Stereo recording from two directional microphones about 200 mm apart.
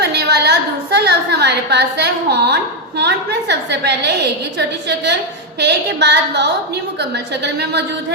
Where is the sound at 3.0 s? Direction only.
55° right (ahead or behind).